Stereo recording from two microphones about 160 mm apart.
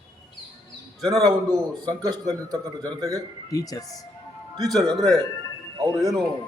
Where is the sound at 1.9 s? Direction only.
25° right (ahead or behind).